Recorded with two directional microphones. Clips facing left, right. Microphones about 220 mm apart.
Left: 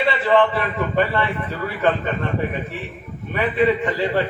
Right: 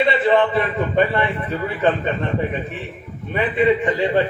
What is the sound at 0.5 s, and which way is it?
Speech, 20° right (ahead or behind).